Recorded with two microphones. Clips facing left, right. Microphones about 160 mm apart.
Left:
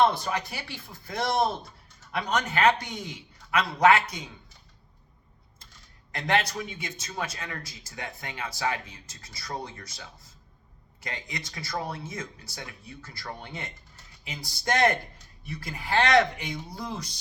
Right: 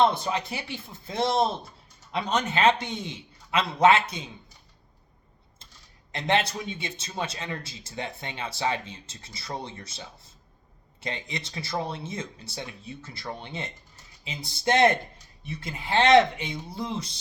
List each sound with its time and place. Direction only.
0.0 s speech: 20° right (ahead or behind)
6.1 s speech: 25° right (ahead or behind)